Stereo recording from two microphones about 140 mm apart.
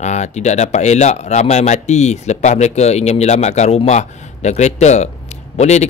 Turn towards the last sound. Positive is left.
turn(degrees=55)  # may be behind; listen again after turning